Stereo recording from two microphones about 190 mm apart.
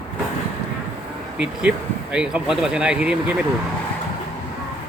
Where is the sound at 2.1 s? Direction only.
5° right (ahead or behind).